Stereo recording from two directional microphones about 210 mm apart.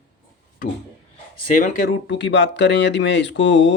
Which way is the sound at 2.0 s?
55° left (ahead or behind).